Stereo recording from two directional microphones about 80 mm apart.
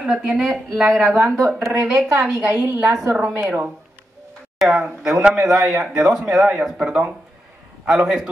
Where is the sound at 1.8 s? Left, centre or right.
Centre.